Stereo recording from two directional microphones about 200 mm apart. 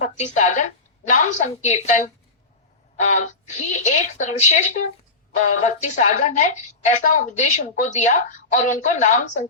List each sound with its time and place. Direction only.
0.0 s a woman's voice: 35° left (ahead or behind)